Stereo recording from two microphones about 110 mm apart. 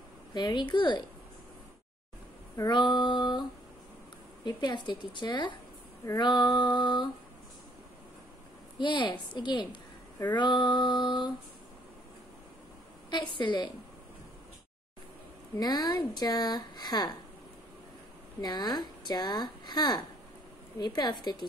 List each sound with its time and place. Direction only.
0.3 s a woman's voice: 40° left (ahead or behind)
2.6 s a woman's voice: 40° left (ahead or behind)
4.5 s a woman's voice: 40° left (ahead or behind)
8.7 s a woman's voice: 45° left (ahead or behind)
13.1 s a woman's voice: 45° left (ahead or behind)
15.6 s speech: 35° left (ahead or behind)
18.4 s speech: 40° left (ahead or behind)